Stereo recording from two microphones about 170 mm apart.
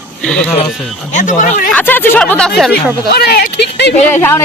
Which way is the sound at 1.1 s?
45° left (ahead or behind).